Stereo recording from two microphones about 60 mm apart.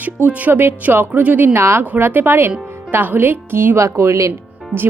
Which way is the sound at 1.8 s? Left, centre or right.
Right.